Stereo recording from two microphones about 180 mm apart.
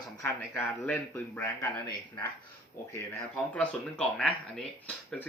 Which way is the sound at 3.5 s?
5° left (ahead or behind).